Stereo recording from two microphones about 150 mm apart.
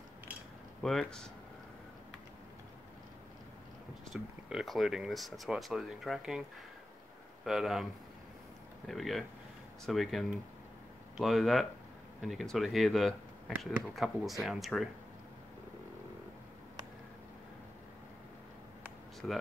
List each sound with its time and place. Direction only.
0.8 s speech: 5° left (ahead or behind)
4.1 s speech: centre (ahead or behind)
7.4 s speech: centre (ahead or behind)
19.2 s speech: 5° left (ahead or behind)